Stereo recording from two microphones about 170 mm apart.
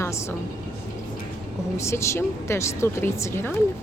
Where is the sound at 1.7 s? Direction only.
15° left (ahead or behind).